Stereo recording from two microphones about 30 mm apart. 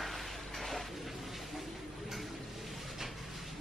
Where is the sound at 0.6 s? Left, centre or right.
Centre.